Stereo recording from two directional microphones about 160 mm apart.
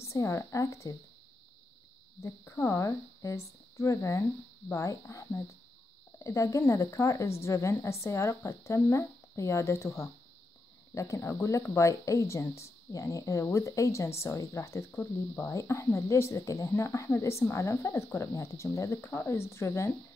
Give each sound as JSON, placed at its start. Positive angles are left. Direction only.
{"t": 0.0, "sound": "speech", "side_deg": 20}
{"t": 2.2, "sound": "speech", "side_deg": 20}